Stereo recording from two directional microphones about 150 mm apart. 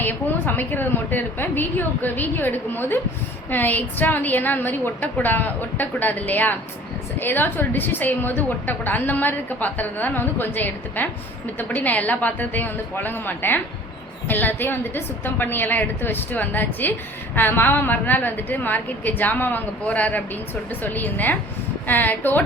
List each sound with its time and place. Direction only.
0.0 s a woman's voice: 15° left (ahead or behind)